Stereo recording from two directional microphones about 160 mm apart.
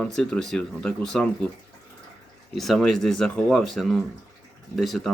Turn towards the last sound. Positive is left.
turn(degrees=0)  # may be behind; listen again after turning